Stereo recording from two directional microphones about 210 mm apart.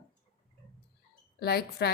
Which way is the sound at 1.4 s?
50° left (ahead or behind).